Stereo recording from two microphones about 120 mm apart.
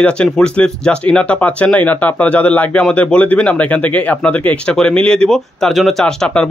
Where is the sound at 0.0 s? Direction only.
10° left (ahead or behind).